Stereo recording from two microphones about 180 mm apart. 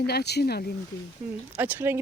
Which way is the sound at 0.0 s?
65° left (ahead or behind).